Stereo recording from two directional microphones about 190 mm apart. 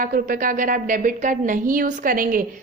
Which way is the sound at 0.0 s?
45° right (ahead or behind).